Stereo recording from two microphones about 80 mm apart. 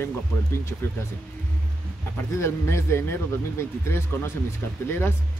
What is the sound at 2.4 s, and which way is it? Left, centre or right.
Speech, left.